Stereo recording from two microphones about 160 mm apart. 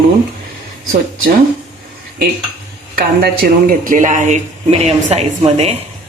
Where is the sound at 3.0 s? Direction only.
70° right (ahead or behind); by 5.7 s 40° right (ahead or behind).